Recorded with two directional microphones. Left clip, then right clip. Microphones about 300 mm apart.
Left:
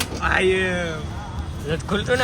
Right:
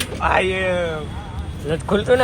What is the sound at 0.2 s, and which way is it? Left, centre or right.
Speech, centre.